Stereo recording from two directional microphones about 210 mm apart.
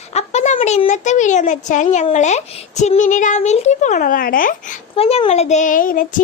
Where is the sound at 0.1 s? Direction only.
30° left (ahead or behind).